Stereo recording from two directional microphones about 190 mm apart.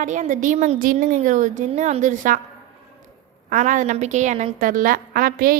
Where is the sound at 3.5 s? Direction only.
40° right (ahead or behind).